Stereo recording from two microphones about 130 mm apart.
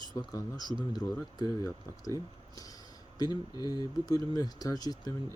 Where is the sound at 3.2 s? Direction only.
30° left (ahead or behind).